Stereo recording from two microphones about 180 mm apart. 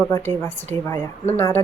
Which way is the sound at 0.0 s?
10° left (ahead or behind).